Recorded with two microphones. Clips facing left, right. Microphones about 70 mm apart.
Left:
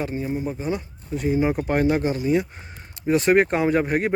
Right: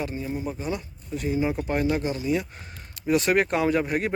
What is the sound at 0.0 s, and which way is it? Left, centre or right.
Speech, left.